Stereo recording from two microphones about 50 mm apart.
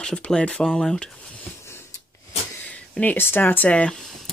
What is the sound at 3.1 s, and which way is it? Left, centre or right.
Speech, left.